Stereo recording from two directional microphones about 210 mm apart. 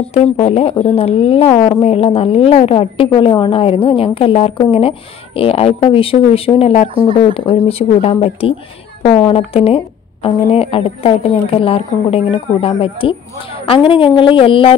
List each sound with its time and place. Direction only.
0.1 s a woman's voice: 30° left (ahead or behind)